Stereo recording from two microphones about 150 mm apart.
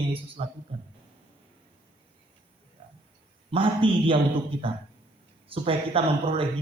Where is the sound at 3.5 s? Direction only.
35° right (ahead or behind).